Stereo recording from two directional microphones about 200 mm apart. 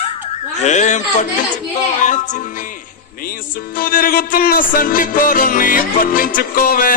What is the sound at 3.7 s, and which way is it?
Music, 45° left (ahead or behind).